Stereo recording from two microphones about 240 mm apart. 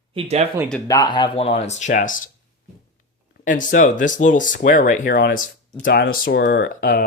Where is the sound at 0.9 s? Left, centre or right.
Centre; by 2.1 s left.